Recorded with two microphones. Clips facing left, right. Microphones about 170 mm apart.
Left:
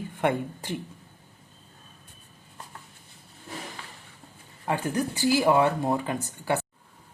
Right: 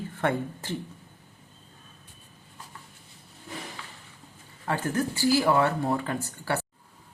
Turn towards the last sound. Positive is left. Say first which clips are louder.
# left 2 dB
turn(degrees=20)  # may be behind; listen again after turning